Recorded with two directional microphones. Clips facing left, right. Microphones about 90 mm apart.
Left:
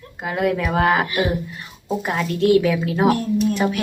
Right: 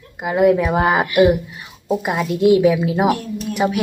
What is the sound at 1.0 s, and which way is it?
Speech, 30° left (ahead or behind).